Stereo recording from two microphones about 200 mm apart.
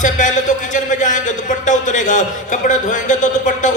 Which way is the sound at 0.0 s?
40° left (ahead or behind).